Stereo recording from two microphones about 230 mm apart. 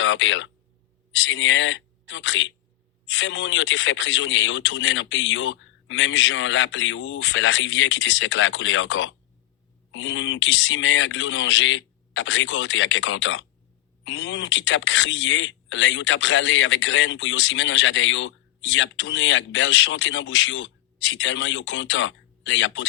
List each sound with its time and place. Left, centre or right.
0.0 s a man's voice: left